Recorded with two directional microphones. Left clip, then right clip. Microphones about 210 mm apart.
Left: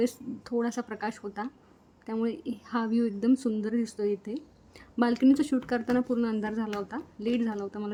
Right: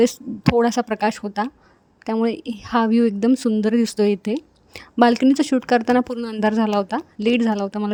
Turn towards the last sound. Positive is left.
turn(degrees=-40)  # may be behind; listen again after turning